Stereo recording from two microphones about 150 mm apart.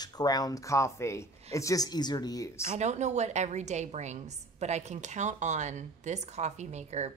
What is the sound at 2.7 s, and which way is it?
A woman's voice, 50° right (ahead or behind).